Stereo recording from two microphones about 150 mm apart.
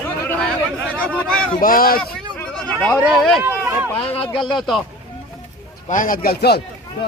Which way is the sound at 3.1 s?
Centre (ahead or behind).